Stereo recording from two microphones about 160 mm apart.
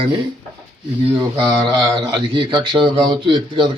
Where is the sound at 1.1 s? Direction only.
30° right (ahead or behind).